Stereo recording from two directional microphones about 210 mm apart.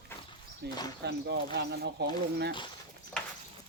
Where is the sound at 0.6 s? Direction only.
50° right (ahead or behind).